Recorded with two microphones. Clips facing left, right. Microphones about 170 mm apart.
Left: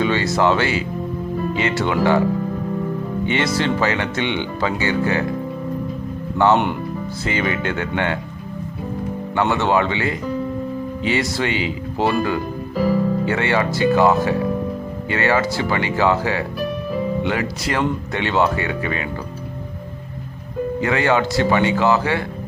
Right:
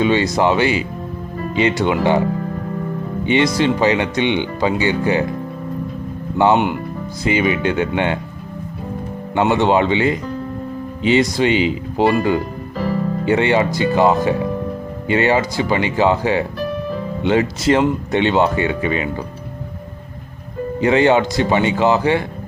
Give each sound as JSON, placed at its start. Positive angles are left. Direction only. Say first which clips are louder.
{"t": 0.0, "sound": "speech", "louder": "right 2 dB", "side_deg": -20}
{"t": 3.2, "sound": "speech", "louder": "right 5 dB", "side_deg": -15}
{"t": 7.3, "sound": "speech", "louder": "right 5 dB", "side_deg": -15}
{"t": 9.3, "sound": "speech", "louder": "right 4 dB", "side_deg": -20}
{"t": 12.7, "sound": "music", "louder": "left 3 dB", "side_deg": 5}
{"t": 13.2, "sound": "speech", "louder": "right 4 dB", "side_deg": -20}
{"t": 20.8, "sound": "speech", "louder": "right 6 dB", "side_deg": -20}